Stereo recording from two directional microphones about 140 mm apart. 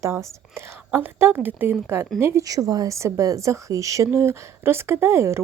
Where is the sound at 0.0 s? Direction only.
20° right (ahead or behind).